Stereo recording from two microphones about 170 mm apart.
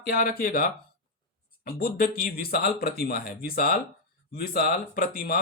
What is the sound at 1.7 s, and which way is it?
Speech, 60° left (ahead or behind).